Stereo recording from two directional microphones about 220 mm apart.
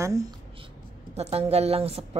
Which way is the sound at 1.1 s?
30° right (ahead or behind).